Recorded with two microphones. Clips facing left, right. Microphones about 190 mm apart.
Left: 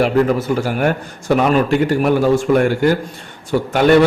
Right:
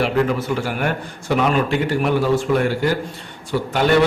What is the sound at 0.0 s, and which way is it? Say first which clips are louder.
A man's voice: left 4 dB; 40° left (ahead or behind).